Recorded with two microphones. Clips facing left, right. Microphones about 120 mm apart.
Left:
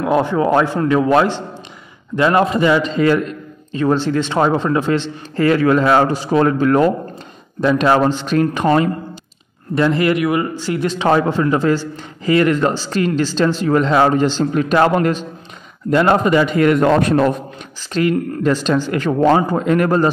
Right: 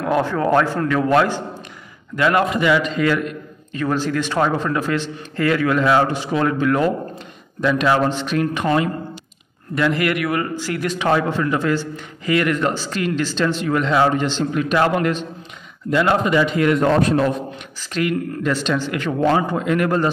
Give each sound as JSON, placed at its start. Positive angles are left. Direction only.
{"t": 0.0, "sound": "a man's voice", "side_deg": 15}
{"t": 17.9, "sound": "a man's voice", "side_deg": 35}